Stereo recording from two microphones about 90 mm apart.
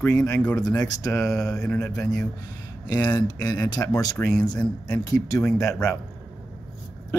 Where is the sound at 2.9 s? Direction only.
50° left (ahead or behind).